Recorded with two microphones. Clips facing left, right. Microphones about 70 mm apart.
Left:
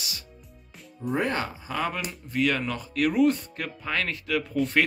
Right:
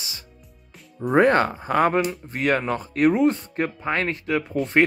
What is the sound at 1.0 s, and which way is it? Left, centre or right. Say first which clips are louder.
Speech: right 10 dB; right.